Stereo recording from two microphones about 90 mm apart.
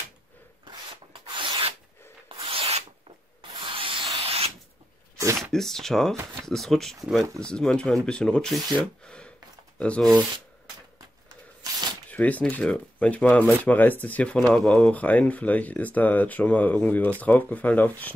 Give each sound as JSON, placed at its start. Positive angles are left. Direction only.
{"t": 0.7, "sound": "rub", "side_deg": -60}
{"t": 2.2, "sound": "rub", "side_deg": -90}
{"t": 5.4, "sound": "speech", "side_deg": 5}
{"t": 12.1, "sound": "speech", "side_deg": 15}